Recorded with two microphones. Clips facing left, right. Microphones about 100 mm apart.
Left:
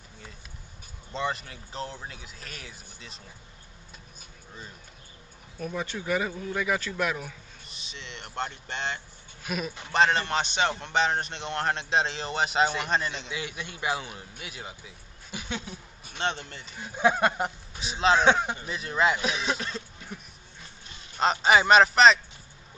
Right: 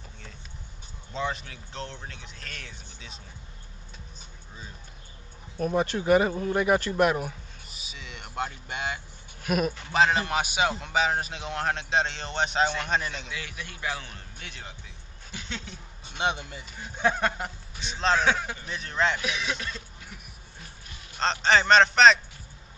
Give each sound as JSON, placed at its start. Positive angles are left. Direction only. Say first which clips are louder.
{"t": 1.1, "sound": "a man's voice", "louder": "even", "side_deg": 0}
{"t": 5.6, "sound": "speech", "louder": "right 7 dB", "side_deg": -45}
{"t": 7.6, "sound": "speech", "louder": "left 2 dB", "side_deg": -5}
{"t": 9.5, "sound": "speech", "louder": "right 6 dB", "side_deg": -50}
{"t": 9.9, "sound": "a man's voice", "louder": "even", "side_deg": -5}
{"t": 13.3, "sound": "a man's voice", "louder": "left 3 dB", "side_deg": 20}
{"t": 16.2, "sound": "speech", "louder": "right 2 dB", "side_deg": -10}
{"t": 16.9, "sound": "a man's voice", "louder": "left 2 dB", "side_deg": 15}
{"t": 17.7, "sound": "a man's voice", "louder": "left 2 dB", "side_deg": 5}
{"t": 18.2, "sound": "a man's voice", "louder": "left 3 dB", "side_deg": 25}
{"t": 18.7, "sound": "a man's voice", "louder": "left 1 dB", "side_deg": 5}
{"t": 19.2, "sound": "speech", "louder": "left 2 dB", "side_deg": 30}
{"t": 21.2, "sound": "a man's voice", "louder": "left 2 dB", "side_deg": 10}